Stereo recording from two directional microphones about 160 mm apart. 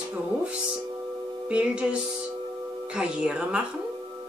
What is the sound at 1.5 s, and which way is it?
Speech, 5° right (ahead or behind).